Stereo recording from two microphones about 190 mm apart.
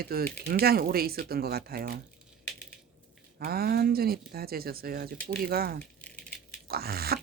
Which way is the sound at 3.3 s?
55° right (ahead or behind).